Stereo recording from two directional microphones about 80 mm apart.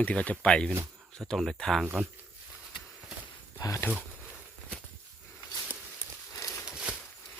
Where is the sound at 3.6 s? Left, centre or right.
Left.